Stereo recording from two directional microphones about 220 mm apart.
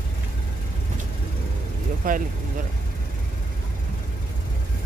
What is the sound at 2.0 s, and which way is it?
Speech, 40° right (ahead or behind).